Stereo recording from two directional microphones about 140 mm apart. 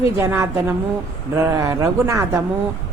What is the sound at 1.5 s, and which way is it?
Speech, 25° right (ahead or behind).